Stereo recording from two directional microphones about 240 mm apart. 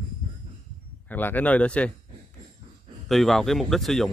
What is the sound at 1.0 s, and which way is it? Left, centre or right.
Speech, centre.